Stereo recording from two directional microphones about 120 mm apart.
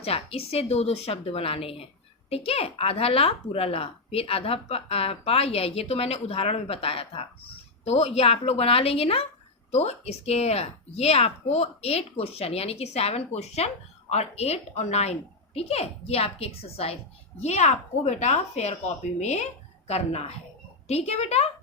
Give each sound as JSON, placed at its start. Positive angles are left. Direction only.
{"t": 0.0, "sound": "a woman's voice", "side_deg": 55}
{"t": 7.9, "sound": "a woman's voice", "side_deg": 60}
{"t": 17.4, "sound": "a woman's voice", "side_deg": 65}